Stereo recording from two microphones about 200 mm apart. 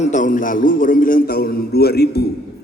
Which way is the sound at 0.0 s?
40° left (ahead or behind).